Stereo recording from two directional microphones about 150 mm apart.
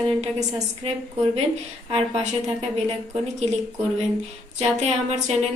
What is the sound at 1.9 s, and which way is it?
Speech, 45° right (ahead or behind).